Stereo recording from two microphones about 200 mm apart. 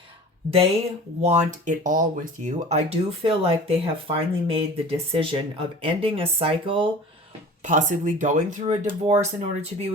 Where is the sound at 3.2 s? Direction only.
25° right (ahead or behind).